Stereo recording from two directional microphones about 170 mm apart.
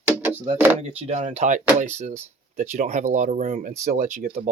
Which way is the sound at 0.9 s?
40° right (ahead or behind).